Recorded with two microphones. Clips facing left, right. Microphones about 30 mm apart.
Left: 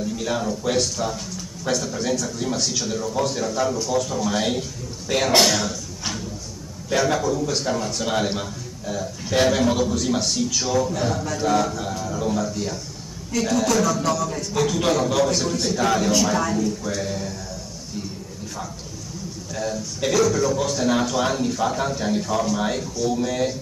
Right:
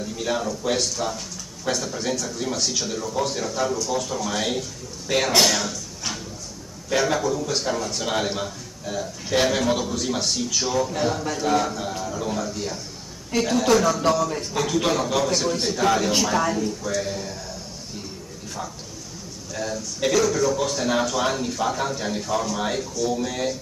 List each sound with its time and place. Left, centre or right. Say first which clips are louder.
0.0 s a man's voice: left 1 dB; centre
5.4 s throat clearing: left 1 dB; centre
6.9 s a man's voice: left 1 dB; centre
16.8 s a man's voice: even; centre
19.5 s a man's voice: left 1 dB; centre